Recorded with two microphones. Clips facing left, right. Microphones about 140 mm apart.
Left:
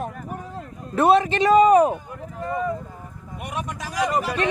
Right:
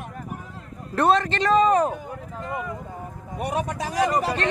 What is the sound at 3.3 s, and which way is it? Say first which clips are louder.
Speech: right 5 dB; 35° right (ahead or behind).